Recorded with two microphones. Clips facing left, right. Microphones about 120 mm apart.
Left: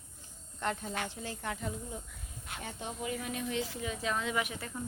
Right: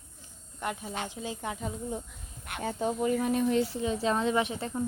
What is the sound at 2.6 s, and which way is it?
A woman's voice, 40° right (ahead or behind).